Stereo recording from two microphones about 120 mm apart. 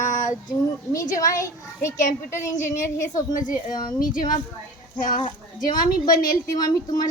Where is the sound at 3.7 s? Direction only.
35° left (ahead or behind).